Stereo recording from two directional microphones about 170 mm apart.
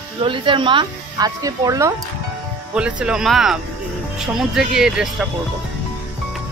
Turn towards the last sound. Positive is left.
turn(degrees=-5)  # may be behind; listen again after turning